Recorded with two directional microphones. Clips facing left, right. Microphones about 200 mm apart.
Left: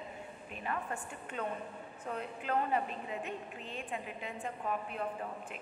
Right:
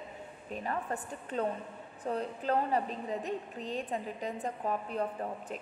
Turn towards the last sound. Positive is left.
turn(degrees=-35)  # may be behind; listen again after turning